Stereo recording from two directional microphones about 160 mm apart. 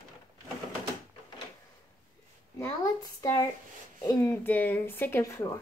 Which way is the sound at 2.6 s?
20° left (ahead or behind).